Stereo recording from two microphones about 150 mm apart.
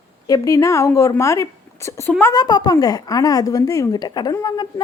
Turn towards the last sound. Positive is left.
turn(degrees=25)  # may be behind; listen again after turning